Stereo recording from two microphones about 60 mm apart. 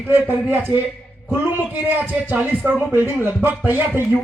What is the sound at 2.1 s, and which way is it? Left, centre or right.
A man's voice, right.